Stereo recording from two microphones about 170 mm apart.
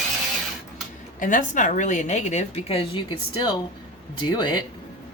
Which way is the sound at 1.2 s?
50° left (ahead or behind).